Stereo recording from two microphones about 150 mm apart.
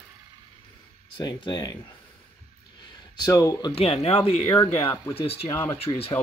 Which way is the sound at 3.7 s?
40° left (ahead or behind).